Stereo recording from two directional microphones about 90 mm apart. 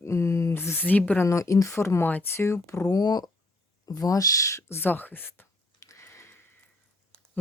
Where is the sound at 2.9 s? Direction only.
45° left (ahead or behind); by 5.4 s 25° left (ahead or behind).